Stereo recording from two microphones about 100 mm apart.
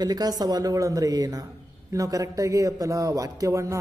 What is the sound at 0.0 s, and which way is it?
A man's voice, 40° right (ahead or behind).